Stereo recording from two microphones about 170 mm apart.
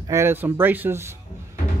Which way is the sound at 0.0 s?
15° right (ahead or behind).